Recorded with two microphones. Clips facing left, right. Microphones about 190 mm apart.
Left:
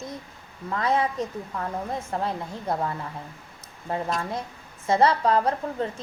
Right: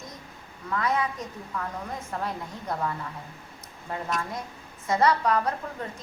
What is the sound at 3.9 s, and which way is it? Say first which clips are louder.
A woman's voice: left 3 dB; 30° left (ahead or behind).